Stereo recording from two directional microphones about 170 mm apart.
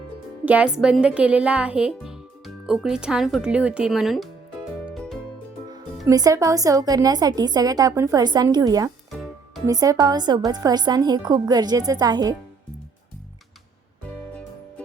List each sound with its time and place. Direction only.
0.4 s speech: 5° right (ahead or behind)
4.9 s music: centre (ahead or behind)
6.1 s a woman's voice: 20° right (ahead or behind)